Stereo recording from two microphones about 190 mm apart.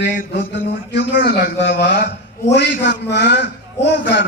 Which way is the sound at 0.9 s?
60° left (ahead or behind).